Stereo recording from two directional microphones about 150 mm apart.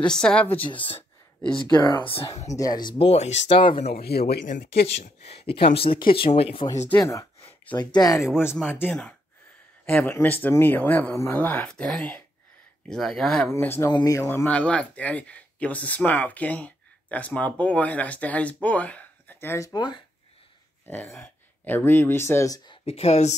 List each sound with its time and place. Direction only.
0.0 s speech: 5° left (ahead or behind)
0.7 s speech: 35° left (ahead or behind)
3.9 s speech: 90° left
4.8 s speech: 45° left (ahead or behind)
7.0 s a sound: 20° left (ahead or behind)
7.7 s speech: 30° left (ahead or behind)
8.5 s speech: 10° left (ahead or behind)
9.8 s speech: 15° left (ahead or behind)
13.5 s speech: 15° left (ahead or behind)
14.2 s speech: 10° left (ahead or behind); by 20.0 s 30° left (ahead or behind)
20.8 s speech: 15° left (ahead or behind)
22.7 s speech: 40° left (ahead or behind)